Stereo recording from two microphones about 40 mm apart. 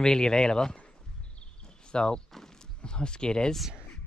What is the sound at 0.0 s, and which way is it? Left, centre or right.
Speech, centre.